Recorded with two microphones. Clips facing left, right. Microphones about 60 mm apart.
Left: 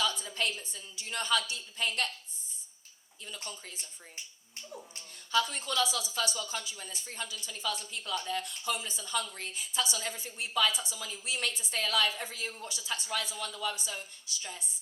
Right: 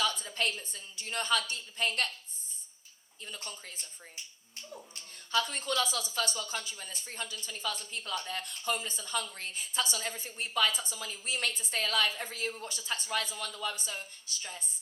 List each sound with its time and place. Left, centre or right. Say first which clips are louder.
0.0 s a woman's voice: even; right
3.5 s speech: left 1 dB; right
5.3 s speech: left 1 dB; right